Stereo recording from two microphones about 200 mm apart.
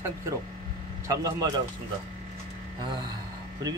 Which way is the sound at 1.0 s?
20° right (ahead or behind).